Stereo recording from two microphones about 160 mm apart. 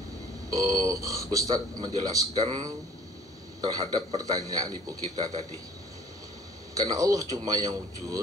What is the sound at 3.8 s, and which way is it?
Speech, 35° right (ahead or behind).